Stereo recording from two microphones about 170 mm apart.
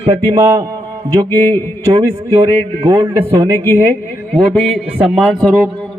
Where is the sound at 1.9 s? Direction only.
25° right (ahead or behind).